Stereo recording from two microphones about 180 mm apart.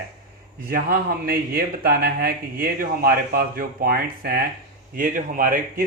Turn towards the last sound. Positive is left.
turn(degrees=-50)  # may be behind; listen again after turning